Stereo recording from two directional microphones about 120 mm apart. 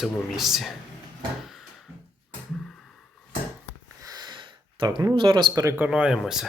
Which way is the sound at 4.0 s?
30° right (ahead or behind).